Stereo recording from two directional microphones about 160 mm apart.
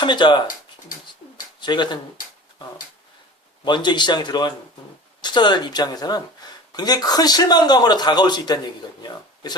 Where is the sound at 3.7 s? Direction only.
30° left (ahead or behind).